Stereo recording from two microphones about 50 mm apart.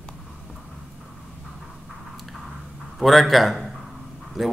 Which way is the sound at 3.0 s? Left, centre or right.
Centre.